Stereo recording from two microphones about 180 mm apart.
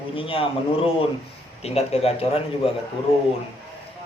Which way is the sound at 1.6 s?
35° left (ahead or behind).